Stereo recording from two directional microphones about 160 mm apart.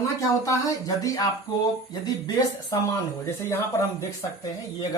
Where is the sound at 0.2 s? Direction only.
20° left (ahead or behind).